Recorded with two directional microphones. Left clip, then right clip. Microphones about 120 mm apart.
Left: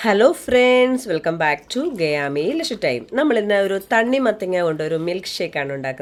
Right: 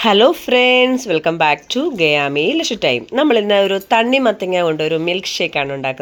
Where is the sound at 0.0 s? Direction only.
10° right (ahead or behind).